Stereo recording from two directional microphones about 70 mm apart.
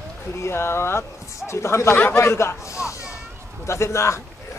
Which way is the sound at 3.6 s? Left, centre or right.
Left.